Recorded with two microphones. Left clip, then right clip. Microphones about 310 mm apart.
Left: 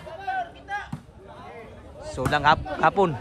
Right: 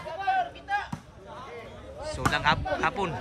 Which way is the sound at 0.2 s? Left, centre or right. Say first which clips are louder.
Right 3 dB; right.